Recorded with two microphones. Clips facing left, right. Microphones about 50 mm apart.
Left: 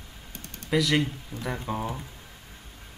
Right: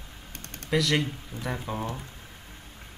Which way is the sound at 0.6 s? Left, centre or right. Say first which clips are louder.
Left 1 dB; centre.